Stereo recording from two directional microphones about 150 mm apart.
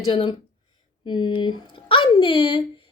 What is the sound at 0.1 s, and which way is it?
Speech, 30° left (ahead or behind).